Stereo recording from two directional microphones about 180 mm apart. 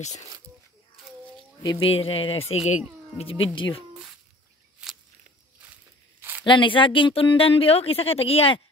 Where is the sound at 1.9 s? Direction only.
30° left (ahead or behind).